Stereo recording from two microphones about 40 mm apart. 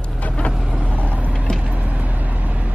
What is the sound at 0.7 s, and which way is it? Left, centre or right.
Vehicle, right.